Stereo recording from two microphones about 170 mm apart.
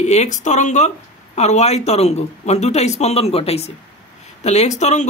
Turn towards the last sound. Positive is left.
turn(degrees=45)  # may be behind; listen again after turning